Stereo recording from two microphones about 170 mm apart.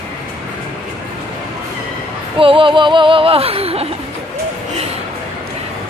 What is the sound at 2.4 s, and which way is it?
Speech, 30° right (ahead or behind).